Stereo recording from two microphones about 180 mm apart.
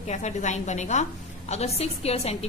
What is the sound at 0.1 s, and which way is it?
A woman's voice, 40° left (ahead or behind).